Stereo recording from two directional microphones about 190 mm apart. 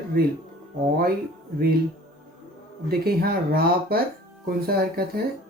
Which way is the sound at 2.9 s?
55° right (ahead or behind).